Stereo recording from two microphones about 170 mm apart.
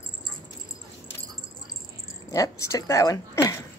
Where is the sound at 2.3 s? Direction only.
20° left (ahead or behind).